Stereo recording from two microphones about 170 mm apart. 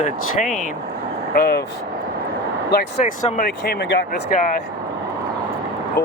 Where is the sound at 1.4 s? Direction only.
70° left (ahead or behind).